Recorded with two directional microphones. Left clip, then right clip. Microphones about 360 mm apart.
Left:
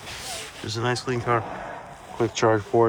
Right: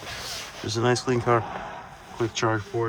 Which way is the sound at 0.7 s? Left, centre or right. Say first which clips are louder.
Right 3 dB; centre.